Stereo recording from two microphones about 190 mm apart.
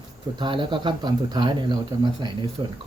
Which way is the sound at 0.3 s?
25° right (ahead or behind).